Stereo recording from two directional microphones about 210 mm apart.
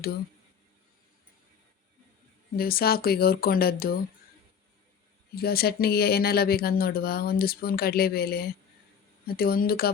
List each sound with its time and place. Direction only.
2.6 s speech: 45° left (ahead or behind)
5.3 s speech: 45° left (ahead or behind)